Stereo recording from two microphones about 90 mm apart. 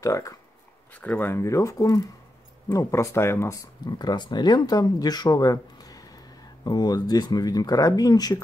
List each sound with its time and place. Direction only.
0.0 s speech: 35° left (ahead or behind)
1.0 s speech: 20° left (ahead or behind)
3.8 s speech: 50° left (ahead or behind)